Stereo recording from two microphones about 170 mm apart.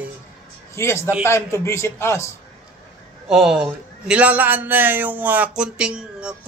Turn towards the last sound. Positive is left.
turn(degrees=-5)  # may be behind; listen again after turning